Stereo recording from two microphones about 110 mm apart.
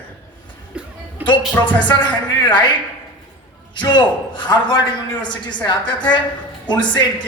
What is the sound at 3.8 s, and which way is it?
Speech, 45° left (ahead or behind).